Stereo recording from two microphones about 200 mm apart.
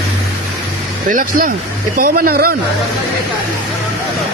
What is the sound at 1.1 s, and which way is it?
Speech, 45° right (ahead or behind).